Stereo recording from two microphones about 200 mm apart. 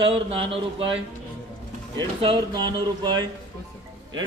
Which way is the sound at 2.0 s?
25° right (ahead or behind).